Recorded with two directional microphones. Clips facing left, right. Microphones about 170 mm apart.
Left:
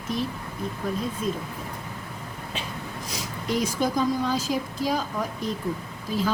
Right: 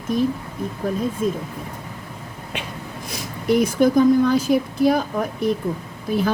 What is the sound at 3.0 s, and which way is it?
A woman's voice, 60° right (ahead or behind).